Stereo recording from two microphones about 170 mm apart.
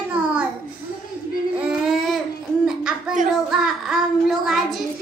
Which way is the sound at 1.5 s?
Centre (ahead or behind).